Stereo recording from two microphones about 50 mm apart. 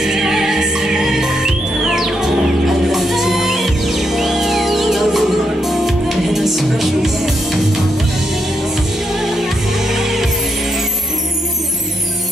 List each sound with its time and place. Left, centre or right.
0.0 s music: centre
9.2 s music: centre